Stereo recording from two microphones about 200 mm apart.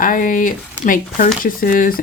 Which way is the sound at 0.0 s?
45° left (ahead or behind).